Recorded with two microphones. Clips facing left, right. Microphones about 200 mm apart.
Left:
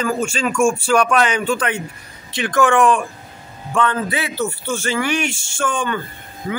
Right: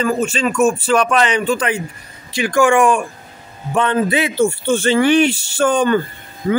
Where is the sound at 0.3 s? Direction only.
10° left (ahead or behind).